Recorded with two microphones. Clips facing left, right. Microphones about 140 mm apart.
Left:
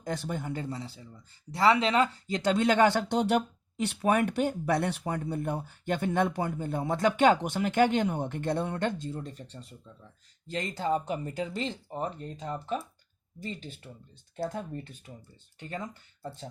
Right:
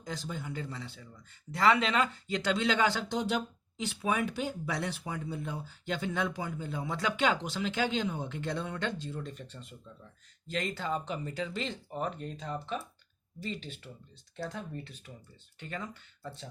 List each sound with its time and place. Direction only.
0.0 s speech: 55° left (ahead or behind); by 12.8 s 40° left (ahead or behind)
14.3 s speech: 40° left (ahead or behind)